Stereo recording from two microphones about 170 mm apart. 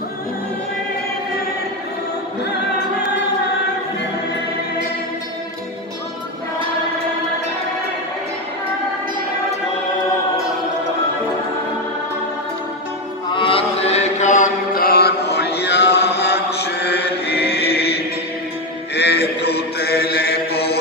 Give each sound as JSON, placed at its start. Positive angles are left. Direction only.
{"t": 13.3, "sound": "chant", "side_deg": 30}
{"t": 18.9, "sound": "mantra", "side_deg": 80}